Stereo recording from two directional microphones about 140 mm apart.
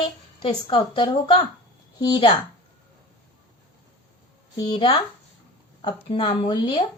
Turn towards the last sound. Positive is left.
turn(degrees=40)  # may be behind; listen again after turning